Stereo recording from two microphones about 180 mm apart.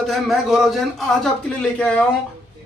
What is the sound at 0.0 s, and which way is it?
A man's voice, centre (ahead or behind).